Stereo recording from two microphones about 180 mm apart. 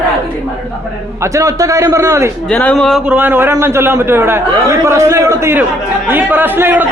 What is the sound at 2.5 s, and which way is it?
Speech, 5° left (ahead or behind).